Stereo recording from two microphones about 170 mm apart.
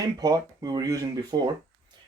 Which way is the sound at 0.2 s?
20° right (ahead or behind).